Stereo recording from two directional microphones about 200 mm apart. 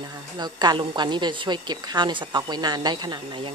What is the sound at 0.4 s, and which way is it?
A woman's voice, 20° right (ahead or behind).